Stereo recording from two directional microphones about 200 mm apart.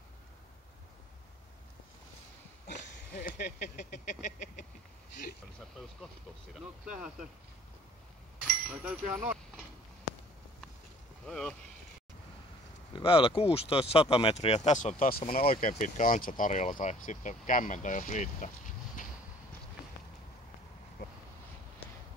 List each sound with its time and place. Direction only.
3.2 s vehicle: 45° left (ahead or behind)
8.5 s speech: 10° right (ahead or behind)
11.2 s speech: 5° left (ahead or behind)
12.9 s speech: 25° left (ahead or behind)